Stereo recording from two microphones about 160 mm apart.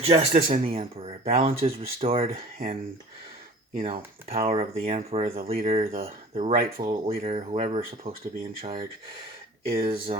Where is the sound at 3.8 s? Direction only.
40° right (ahead or behind).